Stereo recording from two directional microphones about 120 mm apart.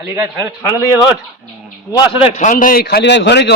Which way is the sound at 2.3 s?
90° left.